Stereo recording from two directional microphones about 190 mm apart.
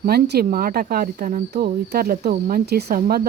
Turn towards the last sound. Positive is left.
turn(degrees=-50)  # may be behind; listen again after turning